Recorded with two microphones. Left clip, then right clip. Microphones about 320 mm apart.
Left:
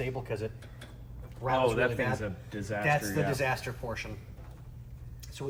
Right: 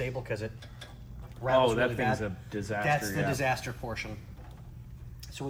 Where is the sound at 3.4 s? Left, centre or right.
Centre.